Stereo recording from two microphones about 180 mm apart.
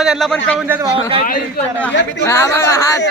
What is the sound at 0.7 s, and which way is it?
Speech, 15° right (ahead or behind).